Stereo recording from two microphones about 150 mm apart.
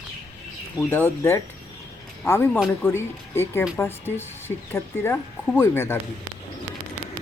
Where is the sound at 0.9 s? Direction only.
15° left (ahead or behind).